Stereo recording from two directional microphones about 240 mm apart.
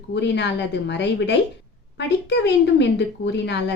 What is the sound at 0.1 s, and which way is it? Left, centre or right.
Speech, left.